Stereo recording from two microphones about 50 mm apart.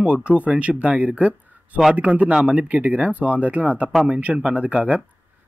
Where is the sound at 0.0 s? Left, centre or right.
Right.